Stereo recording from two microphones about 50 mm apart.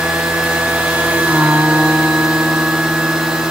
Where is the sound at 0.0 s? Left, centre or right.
Centre.